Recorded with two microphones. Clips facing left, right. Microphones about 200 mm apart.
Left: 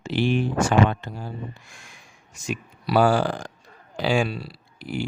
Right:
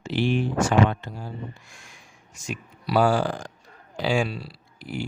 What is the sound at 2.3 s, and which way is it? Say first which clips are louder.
Speech: left 4 dB; 70° left (ahead or behind).